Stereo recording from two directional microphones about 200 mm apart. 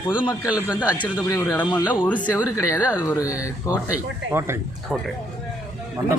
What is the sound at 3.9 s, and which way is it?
Speech, 10° right (ahead or behind).